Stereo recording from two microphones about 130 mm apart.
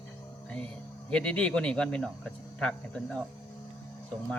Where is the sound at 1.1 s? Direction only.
10° left (ahead or behind).